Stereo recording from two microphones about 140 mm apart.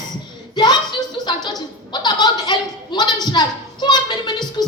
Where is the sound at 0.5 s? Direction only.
30° left (ahead or behind).